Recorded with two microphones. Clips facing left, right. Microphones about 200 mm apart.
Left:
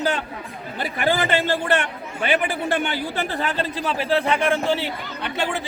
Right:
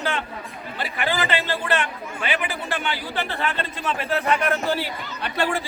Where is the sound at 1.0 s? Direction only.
50° left (ahead or behind); by 4.9 s 25° left (ahead or behind).